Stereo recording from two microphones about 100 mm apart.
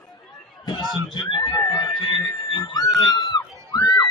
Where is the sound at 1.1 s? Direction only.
55° left (ahead or behind).